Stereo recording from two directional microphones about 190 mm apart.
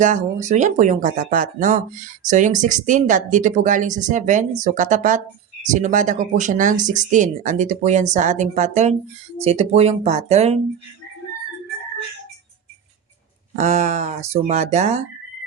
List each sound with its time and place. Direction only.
0.0 s speech: 40° right (ahead or behind)
13.6 s speech: 40° right (ahead or behind)